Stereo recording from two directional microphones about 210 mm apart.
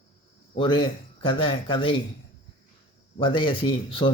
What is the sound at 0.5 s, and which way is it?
Speech, 25° left (ahead or behind).